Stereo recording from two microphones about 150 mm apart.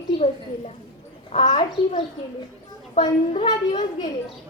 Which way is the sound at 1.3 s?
35° left (ahead or behind).